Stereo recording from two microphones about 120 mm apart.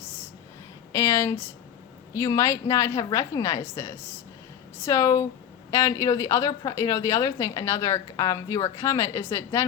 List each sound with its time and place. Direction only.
0.9 s a woman's voice: 25° left (ahead or behind)